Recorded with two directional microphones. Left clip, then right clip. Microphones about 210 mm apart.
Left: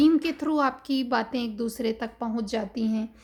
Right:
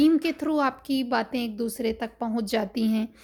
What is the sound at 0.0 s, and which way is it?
A woman's voice, 15° right (ahead or behind).